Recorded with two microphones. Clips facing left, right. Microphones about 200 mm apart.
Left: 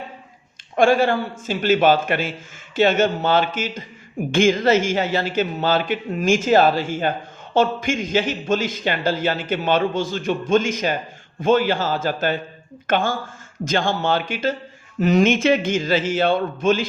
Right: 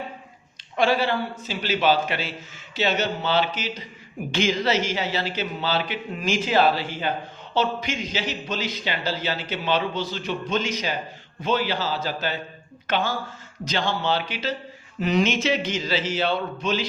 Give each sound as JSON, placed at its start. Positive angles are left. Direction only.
{"t": 0.8, "sound": "a man's voice", "side_deg": 50}